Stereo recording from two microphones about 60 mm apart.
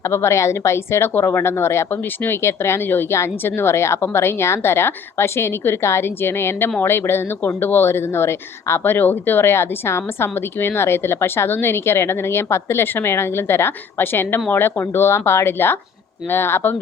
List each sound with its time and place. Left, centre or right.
0.1 s speech: left